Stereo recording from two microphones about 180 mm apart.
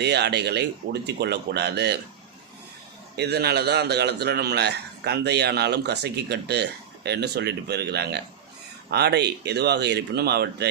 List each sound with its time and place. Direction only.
0.0 s speech: 70° right (ahead or behind)
3.2 s a man's voice: 65° right (ahead or behind)